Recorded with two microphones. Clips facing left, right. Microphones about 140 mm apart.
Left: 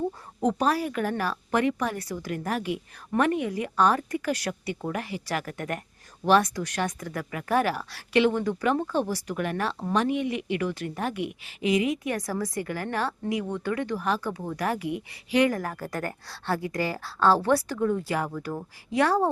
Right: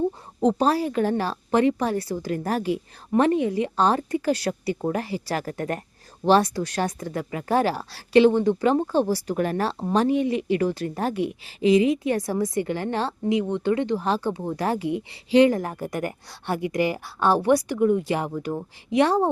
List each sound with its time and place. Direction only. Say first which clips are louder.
0.3 s a woman's voice: right 4 dB; 30° right (ahead or behind)